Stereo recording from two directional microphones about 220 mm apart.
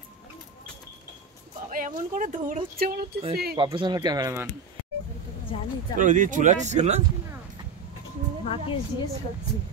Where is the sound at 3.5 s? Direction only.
20° right (ahead or behind).